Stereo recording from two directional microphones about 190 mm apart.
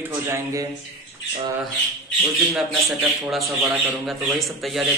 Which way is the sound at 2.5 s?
Centre (ahead or behind).